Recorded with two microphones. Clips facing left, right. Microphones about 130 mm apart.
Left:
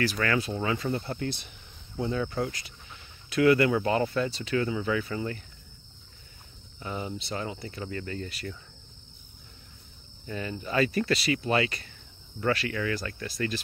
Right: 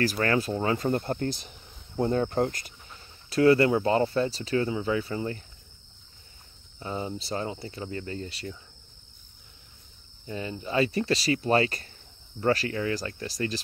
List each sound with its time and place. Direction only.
0.0 s speech: 40° right (ahead or behind)
2.0 s cricket: 45° right (ahead or behind)
3.0 s speech: 35° right (ahead or behind)
6.8 s speech: 30° right (ahead or behind)
10.2 s speech: 25° right (ahead or behind)